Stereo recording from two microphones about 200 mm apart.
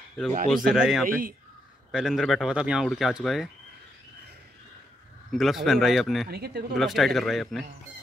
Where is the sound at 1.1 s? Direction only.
45° right (ahead or behind).